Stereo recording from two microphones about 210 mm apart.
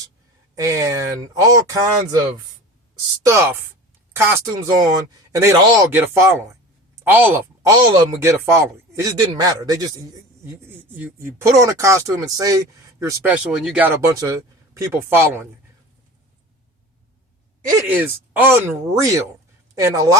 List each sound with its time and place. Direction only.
0.5 s a man's voice: 15° right (ahead or behind)
3.2 s a man's voice: 15° right (ahead or behind)
17.7 s a man's voice: 10° right (ahead or behind)